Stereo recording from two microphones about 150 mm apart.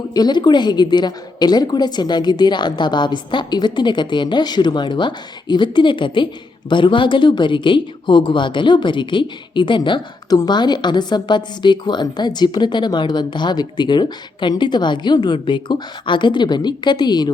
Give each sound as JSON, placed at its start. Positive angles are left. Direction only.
{"t": 0.1, "sound": "a woman's voice", "side_deg": 30}